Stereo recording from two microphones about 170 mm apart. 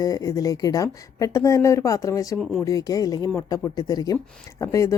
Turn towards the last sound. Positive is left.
turn(degrees=20)  # may be behind; listen again after turning